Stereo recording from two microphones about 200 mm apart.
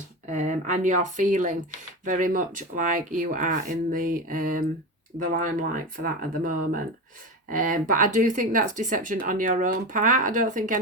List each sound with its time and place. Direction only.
0.3 s speech: 40° right (ahead or behind)